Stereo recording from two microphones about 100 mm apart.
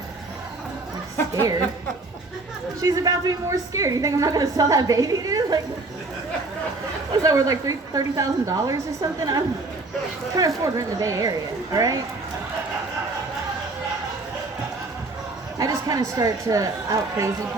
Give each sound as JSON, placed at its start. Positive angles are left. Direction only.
{"t": 2.8, "sound": "a woman's voice", "side_deg": -35}
{"t": 7.2, "sound": "a woman's voice", "side_deg": -35}
{"t": 15.5, "sound": "speech", "side_deg": -35}